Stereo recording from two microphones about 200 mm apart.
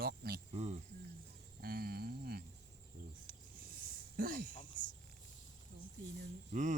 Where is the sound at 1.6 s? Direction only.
50° right (ahead or behind).